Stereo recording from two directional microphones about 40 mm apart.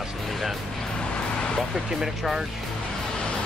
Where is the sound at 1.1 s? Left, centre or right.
Left.